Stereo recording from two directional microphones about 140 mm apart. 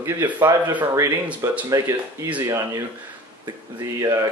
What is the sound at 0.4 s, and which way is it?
Speech, 20° right (ahead or behind).